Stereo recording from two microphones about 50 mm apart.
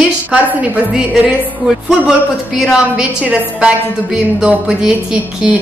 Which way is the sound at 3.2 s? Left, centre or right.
Right.